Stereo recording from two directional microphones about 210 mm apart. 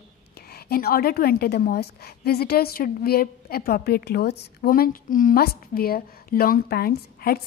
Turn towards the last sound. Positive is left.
turn(degrees=45)  # may be behind; listen again after turning